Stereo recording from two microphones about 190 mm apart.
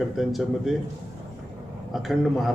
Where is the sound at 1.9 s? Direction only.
Centre (ahead or behind).